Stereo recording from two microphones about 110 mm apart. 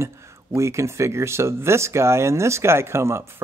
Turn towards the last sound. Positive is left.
turn(degrees=-25)  # may be behind; listen again after turning